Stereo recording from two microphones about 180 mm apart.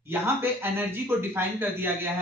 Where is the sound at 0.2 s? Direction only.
10° right (ahead or behind).